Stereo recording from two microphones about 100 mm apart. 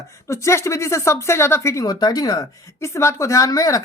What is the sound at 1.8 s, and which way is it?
A woman's voice, 40° left (ahead or behind).